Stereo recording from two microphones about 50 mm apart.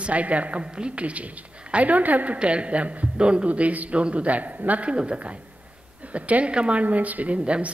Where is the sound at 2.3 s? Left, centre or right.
Right.